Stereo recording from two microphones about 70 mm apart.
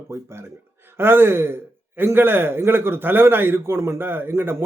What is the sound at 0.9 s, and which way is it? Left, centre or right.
A man's voice, right.